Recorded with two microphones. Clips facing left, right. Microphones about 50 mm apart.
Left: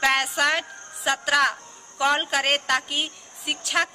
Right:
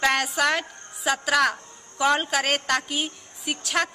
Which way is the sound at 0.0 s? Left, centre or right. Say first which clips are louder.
Left 1 dB; centre.